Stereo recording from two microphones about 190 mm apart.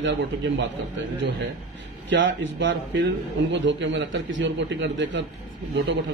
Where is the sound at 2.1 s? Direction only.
75° right (ahead or behind).